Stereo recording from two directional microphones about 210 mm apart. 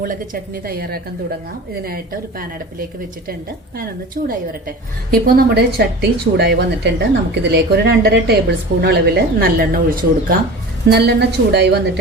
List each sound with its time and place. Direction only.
0.6 s a woman's voice: 45° right (ahead or behind)
4.2 s a woman's voice: 40° right (ahead or behind)